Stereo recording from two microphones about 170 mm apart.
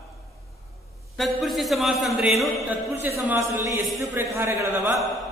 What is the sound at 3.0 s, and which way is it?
A man's voice, 10° right (ahead or behind).